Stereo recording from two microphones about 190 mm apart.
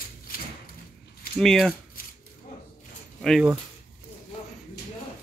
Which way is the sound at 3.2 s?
Centre (ahead or behind).